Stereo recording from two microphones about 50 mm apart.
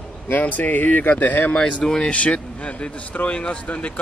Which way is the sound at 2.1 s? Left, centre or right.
Left.